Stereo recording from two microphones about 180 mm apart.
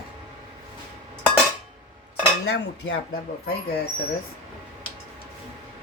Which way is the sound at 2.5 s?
70° left (ahead or behind).